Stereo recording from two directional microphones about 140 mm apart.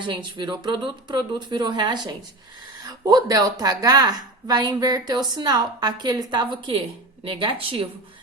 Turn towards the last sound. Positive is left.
turn(degrees=-40)  # may be behind; listen again after turning